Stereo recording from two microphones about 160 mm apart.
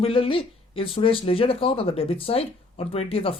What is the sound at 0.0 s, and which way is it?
Speech, 35° left (ahead or behind).